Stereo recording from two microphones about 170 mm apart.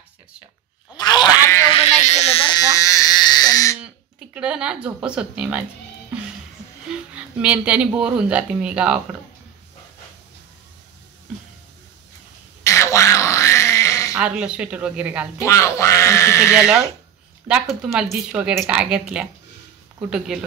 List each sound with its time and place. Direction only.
0.9 s a sound: 25° left (ahead or behind)
1.7 s a sound: 40° left (ahead or behind)
2.5 s baby cry: 20° left (ahead or behind)
3.8 s speech: 5° right (ahead or behind)
7.2 s speech: 5° right (ahead or behind)
12.6 s wail: 20° left (ahead or behind)
14.1 s speech: 5° right (ahead or behind)
15.4 s speech: 15° left (ahead or behind)
17.5 s a woman's voice: 5° right (ahead or behind)